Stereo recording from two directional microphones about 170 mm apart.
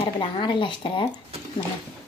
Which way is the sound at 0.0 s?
30° left (ahead or behind).